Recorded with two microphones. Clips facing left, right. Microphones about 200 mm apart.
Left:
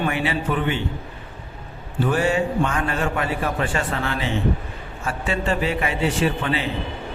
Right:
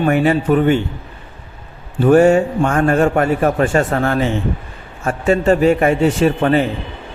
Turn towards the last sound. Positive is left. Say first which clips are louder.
# right 9 dB
turn(degrees=-45)  # may be behind; listen again after turning